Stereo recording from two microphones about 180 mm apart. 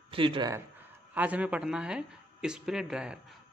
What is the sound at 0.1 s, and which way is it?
Speech, 30° right (ahead or behind).